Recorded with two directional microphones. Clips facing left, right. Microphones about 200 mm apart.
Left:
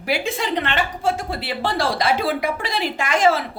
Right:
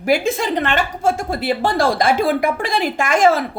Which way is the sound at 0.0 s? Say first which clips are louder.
Right 6 dB; 45° right (ahead or behind).